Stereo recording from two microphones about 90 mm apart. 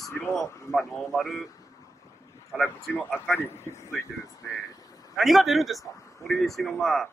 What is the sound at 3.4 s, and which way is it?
Speech, 30° left (ahead or behind).